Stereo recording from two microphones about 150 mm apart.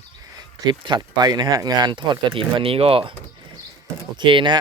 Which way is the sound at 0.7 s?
30° right (ahead or behind).